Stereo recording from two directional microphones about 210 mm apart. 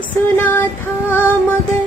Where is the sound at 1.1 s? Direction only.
10° left (ahead or behind).